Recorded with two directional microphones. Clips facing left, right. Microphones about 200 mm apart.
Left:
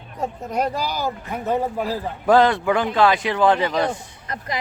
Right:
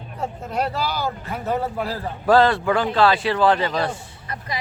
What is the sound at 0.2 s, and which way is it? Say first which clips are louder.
Speech: left 2 dB; 15° left (ahead or behind).